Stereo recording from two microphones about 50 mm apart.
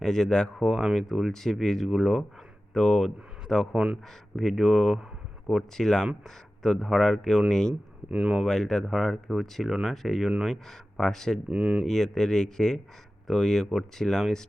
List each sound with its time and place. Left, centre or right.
0.0 s speech: centre
2.7 s speech: centre
8.1 s speech: centre
8.4 s speech: centre
11.4 s speech: centre
11.9 s speech: centre